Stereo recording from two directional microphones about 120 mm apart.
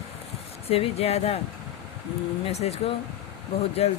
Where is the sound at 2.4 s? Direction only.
60° left (ahead or behind).